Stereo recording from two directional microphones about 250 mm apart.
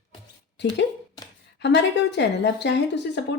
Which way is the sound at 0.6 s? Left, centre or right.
Left.